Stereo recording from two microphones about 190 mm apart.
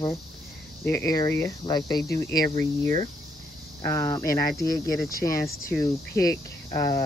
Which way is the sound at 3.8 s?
15° left (ahead or behind).